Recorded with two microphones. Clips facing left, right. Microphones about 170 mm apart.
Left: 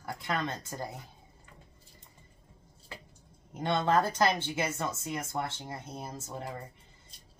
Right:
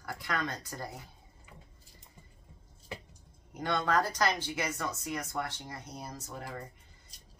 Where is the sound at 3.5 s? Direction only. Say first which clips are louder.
Left 3 dB; 25° left (ahead or behind).